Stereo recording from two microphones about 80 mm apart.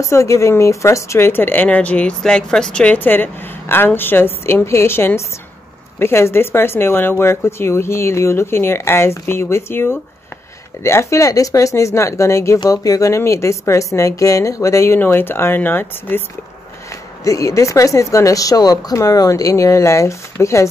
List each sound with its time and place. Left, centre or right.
0.1 s speech: left
15.0 s speech: left
17.2 s a woman's voice: left